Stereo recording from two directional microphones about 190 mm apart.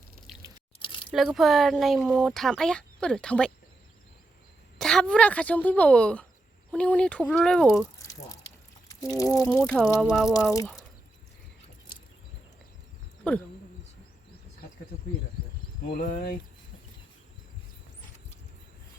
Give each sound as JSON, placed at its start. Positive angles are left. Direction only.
{"t": 1.1, "sound": "speech", "side_deg": 0}
{"t": 4.8, "sound": "speech", "side_deg": 5}
{"t": 9.1, "sound": "speech", "side_deg": 15}
{"t": 9.6, "sound": "speech", "side_deg": 5}
{"t": 13.2, "sound": "speech", "side_deg": 5}
{"t": 16.0, "sound": "speech", "side_deg": 45}